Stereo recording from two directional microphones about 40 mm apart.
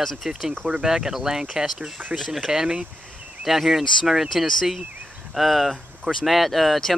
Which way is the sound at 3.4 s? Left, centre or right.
Centre.